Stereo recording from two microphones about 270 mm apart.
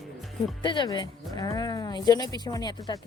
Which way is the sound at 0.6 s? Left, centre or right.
Centre.